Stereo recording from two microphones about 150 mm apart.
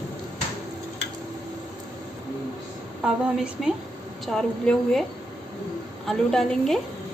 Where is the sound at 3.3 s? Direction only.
5° right (ahead or behind).